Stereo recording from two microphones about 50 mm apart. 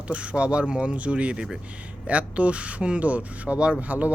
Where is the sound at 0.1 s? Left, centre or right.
Right.